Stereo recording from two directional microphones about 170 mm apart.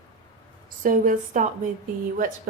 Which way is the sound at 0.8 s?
50° right (ahead or behind).